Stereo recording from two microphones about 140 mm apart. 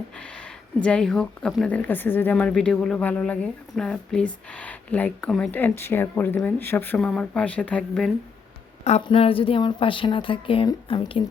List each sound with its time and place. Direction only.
0.2 s speech: 5° left (ahead or behind)
9.0 s speech: 40° left (ahead or behind)